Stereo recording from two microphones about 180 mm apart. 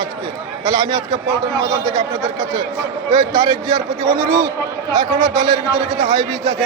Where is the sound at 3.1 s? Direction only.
20° right (ahead or behind).